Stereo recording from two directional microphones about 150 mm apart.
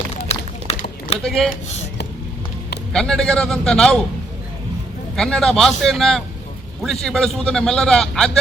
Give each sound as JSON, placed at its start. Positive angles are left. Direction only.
{"t": 0.3, "sound": "run", "side_deg": 45}
{"t": 1.2, "sound": "a man's voice", "side_deg": 5}
{"t": 2.9, "sound": "a man's voice", "side_deg": 5}
{"t": 5.1, "sound": "a man's voice", "side_deg": 5}